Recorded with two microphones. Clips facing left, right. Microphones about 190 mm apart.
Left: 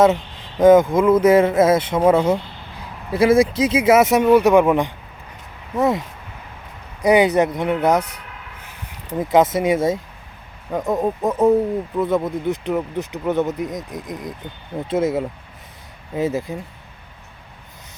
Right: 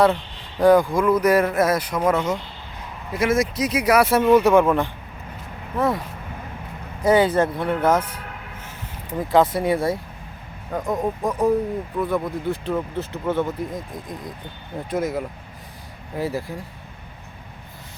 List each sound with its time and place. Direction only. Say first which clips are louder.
0.6 s speech: left 4 dB; 20° left (ahead or behind)
7.0 s speech: left 2 dB; 15° left (ahead or behind)
9.1 s speech: left 2 dB; 20° left (ahead or behind)